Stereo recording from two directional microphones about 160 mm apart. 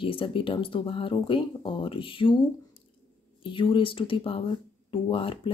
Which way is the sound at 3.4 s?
30° left (ahead or behind).